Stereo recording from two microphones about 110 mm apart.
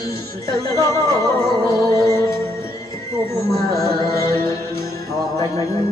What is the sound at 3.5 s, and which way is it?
Music, 30° left (ahead or behind).